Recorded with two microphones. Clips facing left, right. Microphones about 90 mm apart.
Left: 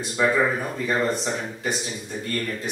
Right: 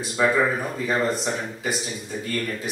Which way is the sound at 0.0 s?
5° right (ahead or behind).